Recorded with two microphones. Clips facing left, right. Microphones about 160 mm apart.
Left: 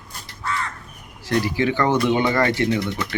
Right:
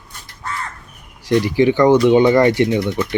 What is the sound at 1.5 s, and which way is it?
Speech, 15° right (ahead or behind).